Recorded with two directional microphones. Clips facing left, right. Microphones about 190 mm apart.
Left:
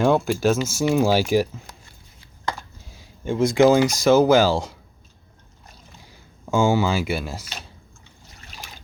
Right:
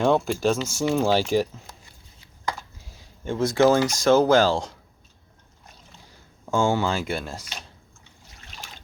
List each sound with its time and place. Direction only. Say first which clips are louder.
0.0 s speech: left 2 dB; 5° left (ahead or behind)
3.2 s speech: left 3 dB; 15° left (ahead or behind)
5.6 s a sound: left 2 dB; 5° left (ahead or behind)
8.4 s boat: left 1 dB; 5° left (ahead or behind)